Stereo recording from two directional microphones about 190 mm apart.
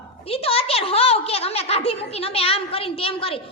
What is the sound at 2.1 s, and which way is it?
A woman's voice, 30° left (ahead or behind).